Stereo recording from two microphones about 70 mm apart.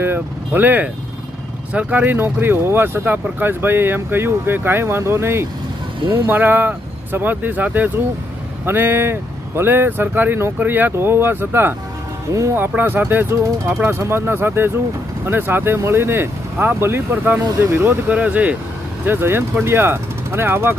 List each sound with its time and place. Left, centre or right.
0.0 s speech: right
12.3 s speech: right
12.5 s speech: right
18.1 s speech: right
19.0 s speech: right